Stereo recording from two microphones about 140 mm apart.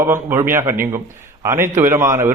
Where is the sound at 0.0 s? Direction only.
15° right (ahead or behind).